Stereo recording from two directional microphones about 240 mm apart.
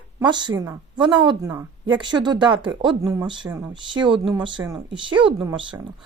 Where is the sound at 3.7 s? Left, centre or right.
Centre.